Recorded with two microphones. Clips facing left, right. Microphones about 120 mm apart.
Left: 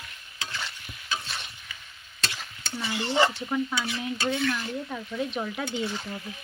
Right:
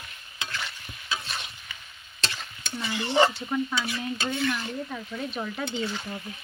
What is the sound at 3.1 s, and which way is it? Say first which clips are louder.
Speech: right 2 dB; 25° right (ahead or behind).